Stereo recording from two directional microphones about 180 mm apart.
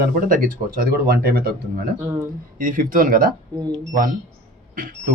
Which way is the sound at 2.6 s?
50° right (ahead or behind).